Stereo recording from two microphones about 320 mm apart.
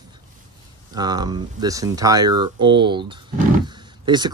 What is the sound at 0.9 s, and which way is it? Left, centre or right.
Speech, centre.